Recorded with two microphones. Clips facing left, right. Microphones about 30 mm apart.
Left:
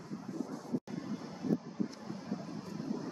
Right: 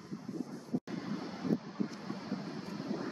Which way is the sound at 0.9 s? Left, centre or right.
Right.